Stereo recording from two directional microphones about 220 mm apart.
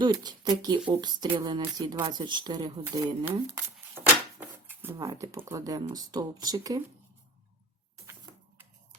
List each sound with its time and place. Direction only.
0.0 s speech: 20° right (ahead or behind)